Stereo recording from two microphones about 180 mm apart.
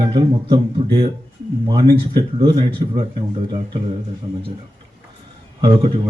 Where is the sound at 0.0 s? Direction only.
25° right (ahead or behind).